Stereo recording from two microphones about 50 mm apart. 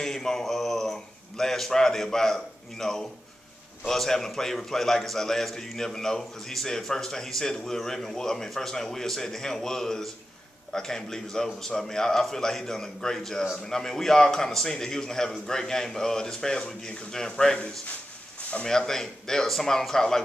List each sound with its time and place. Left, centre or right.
0.0 s a man's voice: centre
18.4 s a sound: left
18.7 s a man's voice: centre